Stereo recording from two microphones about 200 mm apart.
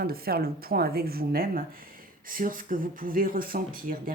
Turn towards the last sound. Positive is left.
turn(degrees=-45)  # may be behind; listen again after turning